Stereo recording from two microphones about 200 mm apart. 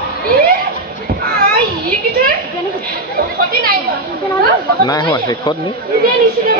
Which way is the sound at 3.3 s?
50° right (ahead or behind).